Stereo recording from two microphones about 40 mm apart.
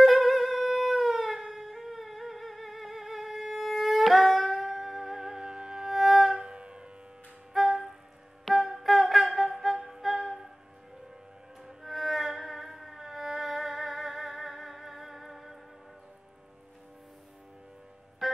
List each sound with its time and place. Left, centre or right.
0.0 s music: centre
5.9 s music: centre
6.3 s siren: right
7.5 s music: centre
8.5 s wind instrument: centre
9.8 s music: centre
10.0 s music: centre
11.6 s music: centre
18.2 s music: centre